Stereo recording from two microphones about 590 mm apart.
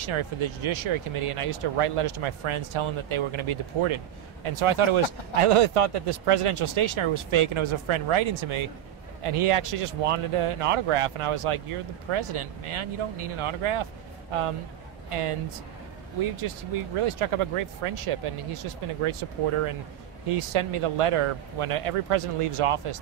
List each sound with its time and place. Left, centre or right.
0.0 s speech: right
15.0 s speech: right
16.3 s speech: right